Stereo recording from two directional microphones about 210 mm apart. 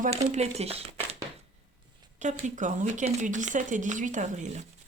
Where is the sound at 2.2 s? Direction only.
35° right (ahead or behind).